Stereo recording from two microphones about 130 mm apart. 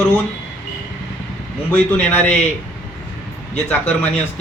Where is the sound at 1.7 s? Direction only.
15° left (ahead or behind).